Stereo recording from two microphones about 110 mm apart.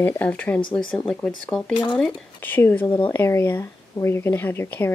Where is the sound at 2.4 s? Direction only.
20° left (ahead or behind).